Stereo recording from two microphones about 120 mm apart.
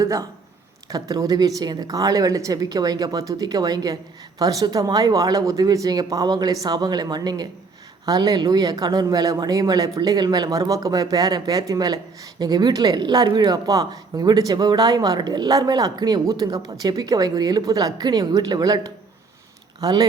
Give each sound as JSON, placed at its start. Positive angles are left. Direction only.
{"t": 0.0, "sound": "a woman's voice", "side_deg": -30}